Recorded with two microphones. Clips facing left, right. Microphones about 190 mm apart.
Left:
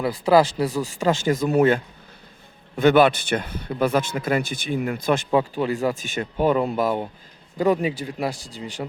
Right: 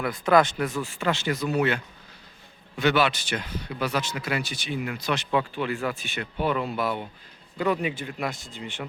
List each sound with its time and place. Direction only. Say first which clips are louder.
0.0 s a man's voice: left 3 dB; 30° left (ahead or behind)